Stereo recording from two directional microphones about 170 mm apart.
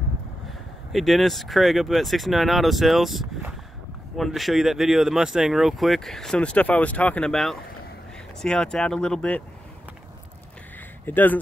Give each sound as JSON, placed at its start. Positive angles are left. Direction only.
{"t": 0.5, "sound": "speech", "side_deg": 0}
{"t": 11.1, "sound": "speech", "side_deg": 10}